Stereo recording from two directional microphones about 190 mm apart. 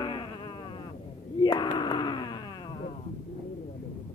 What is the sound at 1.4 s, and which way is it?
Wail, 20° left (ahead or behind).